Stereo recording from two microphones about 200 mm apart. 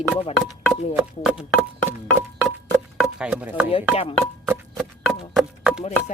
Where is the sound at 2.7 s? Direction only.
Centre (ahead or behind).